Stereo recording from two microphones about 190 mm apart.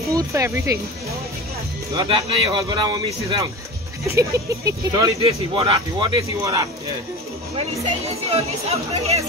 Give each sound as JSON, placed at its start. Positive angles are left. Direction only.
{"t": 0.1, "sound": "speech", "side_deg": -15}
{"t": 2.0, "sound": "speech", "side_deg": -25}
{"t": 8.3, "sound": "speech", "side_deg": -35}